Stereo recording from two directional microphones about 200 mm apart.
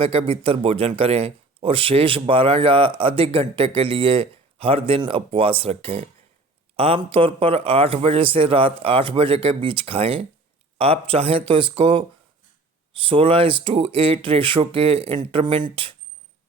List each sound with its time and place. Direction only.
0.0 s a man's voice: 25° right (ahead or behind)
13.1 s a man's voice: 25° right (ahead or behind)